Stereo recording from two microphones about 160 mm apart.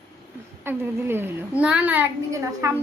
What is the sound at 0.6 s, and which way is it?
A child's voice, 15° right (ahead or behind).